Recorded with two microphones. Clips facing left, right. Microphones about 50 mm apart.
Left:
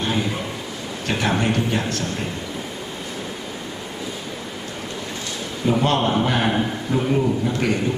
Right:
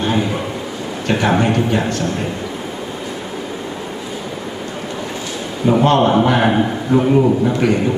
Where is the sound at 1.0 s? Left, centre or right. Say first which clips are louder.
Right 6 dB; centre.